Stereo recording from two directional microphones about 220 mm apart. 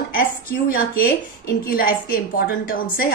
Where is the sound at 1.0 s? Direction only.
40° left (ahead or behind).